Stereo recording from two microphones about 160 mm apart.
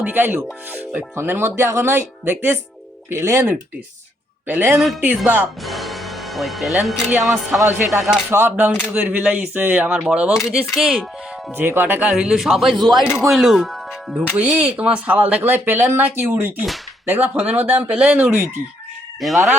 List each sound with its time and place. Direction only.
0.0 s speech: 10° right (ahead or behind)
4.4 s speech: 10° right (ahead or behind)
7.6 s speech: 15° right (ahead or behind)
19.2 s speech: centre (ahead or behind)